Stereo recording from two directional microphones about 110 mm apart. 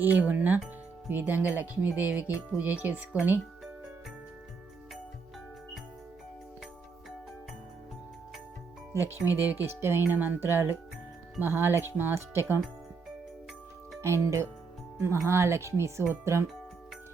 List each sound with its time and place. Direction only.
0.0 s speech: 15° right (ahead or behind)
8.9 s speech: 25° left (ahead or behind)
9.2 s speech: 20° right (ahead or behind)
14.0 s speech: 25° right (ahead or behind)